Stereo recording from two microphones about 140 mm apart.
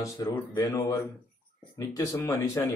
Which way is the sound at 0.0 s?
25° left (ahead or behind).